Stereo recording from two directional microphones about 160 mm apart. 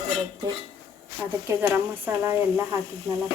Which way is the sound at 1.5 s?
10° right (ahead or behind).